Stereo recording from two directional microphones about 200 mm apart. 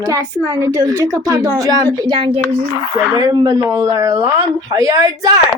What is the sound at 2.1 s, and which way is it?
Speech, 30° right (ahead or behind).